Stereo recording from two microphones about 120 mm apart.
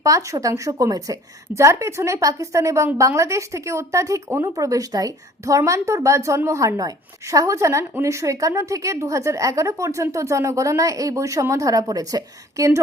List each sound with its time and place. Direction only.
0.0 s a woman's voice: 25° right (ahead or behind)